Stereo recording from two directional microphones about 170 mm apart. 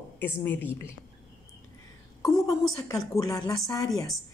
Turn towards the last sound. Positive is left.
turn(degrees=20)  # may be behind; listen again after turning